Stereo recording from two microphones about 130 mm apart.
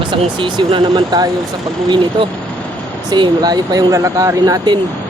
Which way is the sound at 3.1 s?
35° right (ahead or behind).